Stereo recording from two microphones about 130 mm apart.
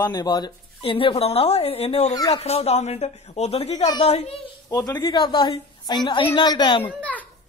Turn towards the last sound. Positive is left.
turn(degrees=10)  # may be behind; listen again after turning